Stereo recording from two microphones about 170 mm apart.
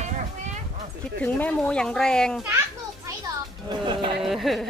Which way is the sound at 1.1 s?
10° left (ahead or behind).